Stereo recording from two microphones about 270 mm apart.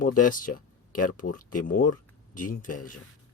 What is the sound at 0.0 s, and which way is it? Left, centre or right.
Speech, left.